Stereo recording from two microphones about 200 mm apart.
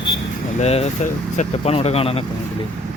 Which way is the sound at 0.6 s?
30° left (ahead or behind).